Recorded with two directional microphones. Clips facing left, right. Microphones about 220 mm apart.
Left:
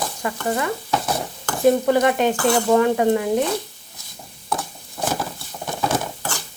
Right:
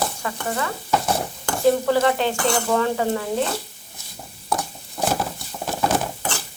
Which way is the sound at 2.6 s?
20° left (ahead or behind).